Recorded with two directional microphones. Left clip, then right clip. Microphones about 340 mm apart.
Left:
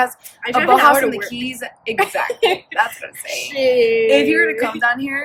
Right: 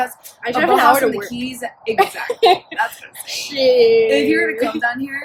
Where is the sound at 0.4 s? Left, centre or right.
Centre.